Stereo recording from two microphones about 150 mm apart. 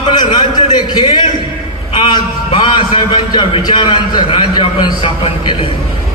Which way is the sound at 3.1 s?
35° left (ahead or behind).